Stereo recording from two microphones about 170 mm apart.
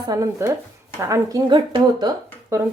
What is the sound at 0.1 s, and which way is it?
A woman's voice, 20° right (ahead or behind).